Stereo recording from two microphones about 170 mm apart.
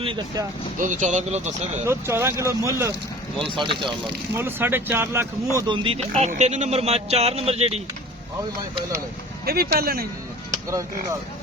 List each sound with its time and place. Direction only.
0.8 s speech: 45° right (ahead or behind)
1.9 s speech: 15° right (ahead or behind)
3.4 s speech: 30° right (ahead or behind)
4.4 s speech: 15° right (ahead or behind)
5.5 s speech: 25° right (ahead or behind)
9.5 s speech: 65° right (ahead or behind)